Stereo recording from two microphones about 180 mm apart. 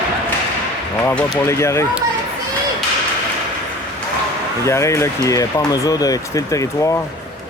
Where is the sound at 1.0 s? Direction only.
10° left (ahead or behind).